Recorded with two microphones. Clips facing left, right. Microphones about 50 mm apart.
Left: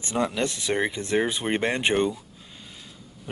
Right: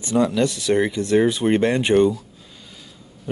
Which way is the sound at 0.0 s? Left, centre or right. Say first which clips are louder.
Right 7 dB; left.